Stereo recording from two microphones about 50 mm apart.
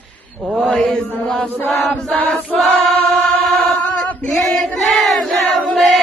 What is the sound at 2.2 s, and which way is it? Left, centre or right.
Chant, left.